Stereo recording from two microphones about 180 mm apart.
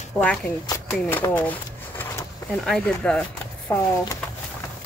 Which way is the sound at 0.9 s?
10° left (ahead or behind).